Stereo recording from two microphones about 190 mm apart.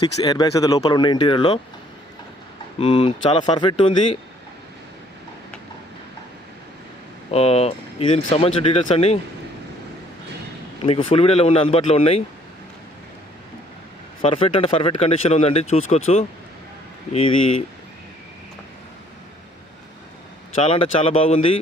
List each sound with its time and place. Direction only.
0.0 s speech: 20° left (ahead or behind)
2.7 s speech: 30° left (ahead or behind)
7.3 s speech: 35° left (ahead or behind)
10.8 s speech: 30° left (ahead or behind)
14.2 s speech: 30° left (ahead or behind)
20.6 s speech: 30° left (ahead or behind)